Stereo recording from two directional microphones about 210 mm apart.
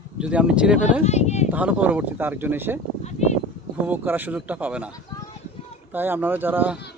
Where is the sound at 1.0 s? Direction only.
30° left (ahead or behind).